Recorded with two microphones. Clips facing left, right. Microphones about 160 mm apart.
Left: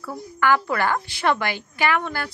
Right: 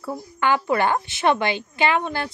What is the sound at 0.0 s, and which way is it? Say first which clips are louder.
Speech: even; 20° right (ahead or behind).